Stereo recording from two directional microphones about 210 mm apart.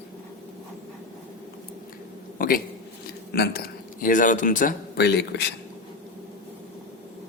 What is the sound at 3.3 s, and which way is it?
Speech, 50° left (ahead or behind).